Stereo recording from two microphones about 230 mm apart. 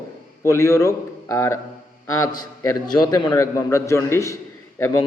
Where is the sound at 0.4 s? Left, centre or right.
Centre.